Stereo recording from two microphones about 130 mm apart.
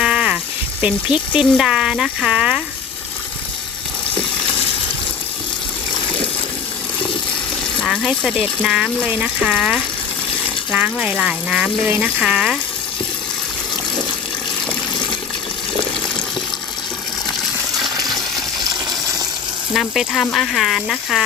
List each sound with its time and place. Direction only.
0.0 s a sound: 10° right (ahead or behind)
0.8 s speech: 10° right (ahead or behind)
7.8 s speech: centre (ahead or behind)
17.9 s water: 30° right (ahead or behind)
19.7 s speech: centre (ahead or behind)